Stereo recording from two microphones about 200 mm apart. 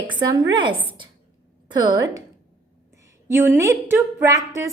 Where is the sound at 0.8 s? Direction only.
25° right (ahead or behind).